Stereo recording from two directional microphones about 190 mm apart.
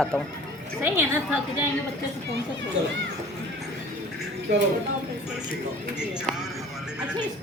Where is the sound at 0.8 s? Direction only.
10° right (ahead or behind).